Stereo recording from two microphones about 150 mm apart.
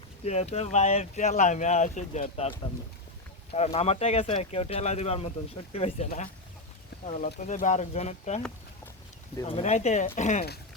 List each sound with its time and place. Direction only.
0.3 s speech: 45° left (ahead or behind)
9.4 s speech: 40° left (ahead or behind)